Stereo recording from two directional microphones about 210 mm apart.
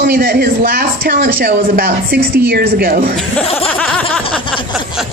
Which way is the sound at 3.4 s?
30° left (ahead or behind).